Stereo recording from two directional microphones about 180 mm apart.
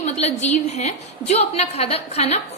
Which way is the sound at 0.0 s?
35° left (ahead or behind).